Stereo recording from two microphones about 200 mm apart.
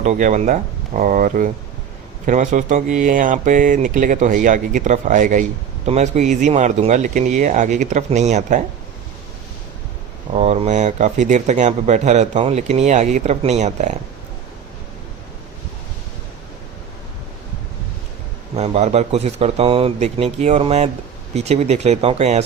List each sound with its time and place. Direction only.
0.0 s speech: 40° right (ahead or behind)
10.3 s speech: 35° right (ahead or behind)
18.5 s speech: 35° right (ahead or behind)